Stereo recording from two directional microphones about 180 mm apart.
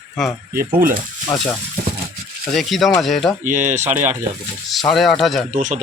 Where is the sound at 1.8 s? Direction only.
50° right (ahead or behind).